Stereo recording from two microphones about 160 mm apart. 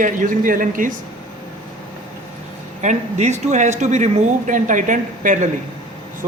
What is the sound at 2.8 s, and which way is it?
A man's voice, 45° right (ahead or behind).